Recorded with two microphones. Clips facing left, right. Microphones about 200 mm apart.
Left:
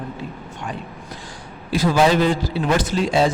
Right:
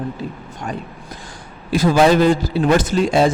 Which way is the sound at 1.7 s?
45° right (ahead or behind).